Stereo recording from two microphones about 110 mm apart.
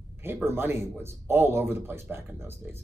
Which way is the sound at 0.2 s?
20° right (ahead or behind).